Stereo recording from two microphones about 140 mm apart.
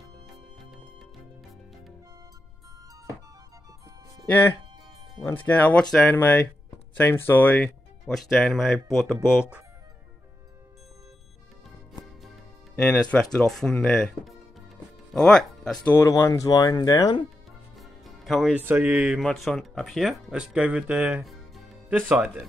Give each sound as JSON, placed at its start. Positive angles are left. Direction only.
{"t": 4.3, "sound": "speech", "side_deg": 15}
{"t": 12.8, "sound": "speech", "side_deg": 10}
{"t": 15.9, "sound": "speech", "side_deg": 20}
{"t": 17.7, "sound": "music", "side_deg": 0}
{"t": 18.6, "sound": "speech", "side_deg": -15}